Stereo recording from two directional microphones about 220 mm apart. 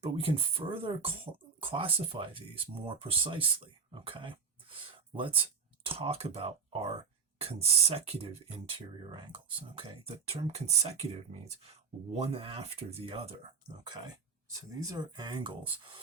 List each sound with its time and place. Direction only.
0.0 s speech: 25° right (ahead or behind)